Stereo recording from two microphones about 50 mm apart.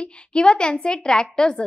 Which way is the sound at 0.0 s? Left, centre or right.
Centre.